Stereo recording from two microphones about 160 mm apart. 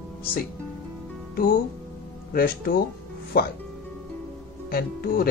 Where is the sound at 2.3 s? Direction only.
70° left (ahead or behind).